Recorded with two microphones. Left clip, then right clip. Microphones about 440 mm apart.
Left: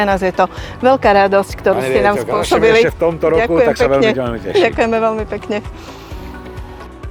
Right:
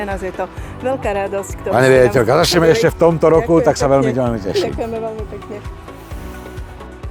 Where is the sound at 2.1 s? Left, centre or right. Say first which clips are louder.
Right 2 dB; right.